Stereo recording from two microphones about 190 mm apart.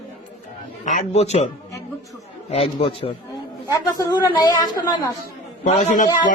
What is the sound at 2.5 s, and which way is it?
Speech, 30° left (ahead or behind).